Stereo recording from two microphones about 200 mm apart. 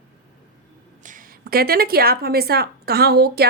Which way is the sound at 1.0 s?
45° right (ahead or behind).